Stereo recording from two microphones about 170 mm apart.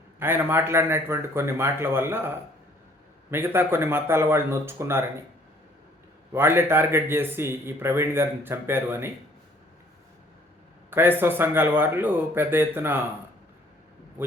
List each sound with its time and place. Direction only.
0.2 s a man's voice: 15° right (ahead or behind)
6.3 s a man's voice: 15° right (ahead or behind)
11.2 s a man's voice: 10° right (ahead or behind)